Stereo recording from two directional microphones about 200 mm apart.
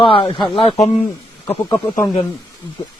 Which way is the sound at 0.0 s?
25° left (ahead or behind).